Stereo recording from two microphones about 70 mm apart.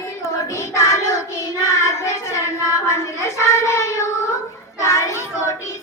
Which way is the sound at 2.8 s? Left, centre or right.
Left.